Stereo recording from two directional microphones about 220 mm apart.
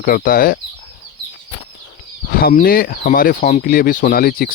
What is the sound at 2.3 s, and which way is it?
Speech, 40° left (ahead or behind).